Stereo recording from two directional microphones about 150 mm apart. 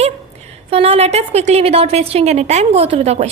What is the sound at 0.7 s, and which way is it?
A woman's voice, 45° right (ahead or behind).